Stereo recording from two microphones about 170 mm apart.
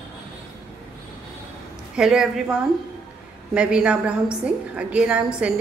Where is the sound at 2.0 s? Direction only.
5° right (ahead or behind).